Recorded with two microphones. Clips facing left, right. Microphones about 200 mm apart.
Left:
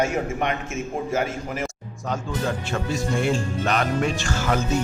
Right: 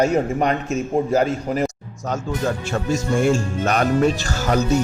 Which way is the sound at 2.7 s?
45° right (ahead or behind).